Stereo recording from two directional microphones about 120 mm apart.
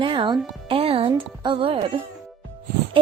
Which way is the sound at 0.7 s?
55° right (ahead or behind).